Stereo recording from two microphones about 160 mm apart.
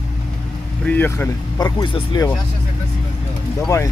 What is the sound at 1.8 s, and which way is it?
Speech, 30° left (ahead or behind).